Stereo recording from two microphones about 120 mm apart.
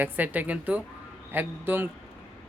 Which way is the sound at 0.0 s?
15° right (ahead or behind).